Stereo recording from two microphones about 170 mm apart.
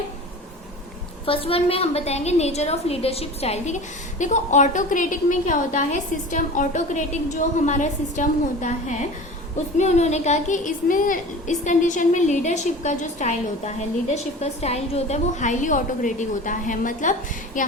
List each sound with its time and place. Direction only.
1.2 s a woman's voice: 35° left (ahead or behind); by 17.7 s 50° left (ahead or behind)